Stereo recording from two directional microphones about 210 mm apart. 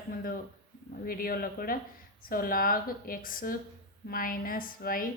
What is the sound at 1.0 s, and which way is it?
A woman's voice, 45° left (ahead or behind).